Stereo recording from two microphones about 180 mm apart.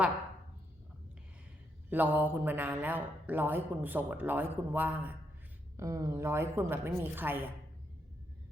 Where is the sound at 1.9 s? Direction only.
10° right (ahead or behind).